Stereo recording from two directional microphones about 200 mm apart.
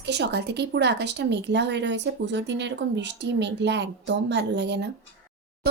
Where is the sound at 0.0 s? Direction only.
55° right (ahead or behind).